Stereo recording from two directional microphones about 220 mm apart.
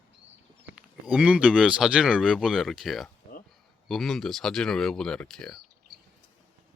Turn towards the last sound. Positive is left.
turn(degrees=5)  # may be behind; listen again after turning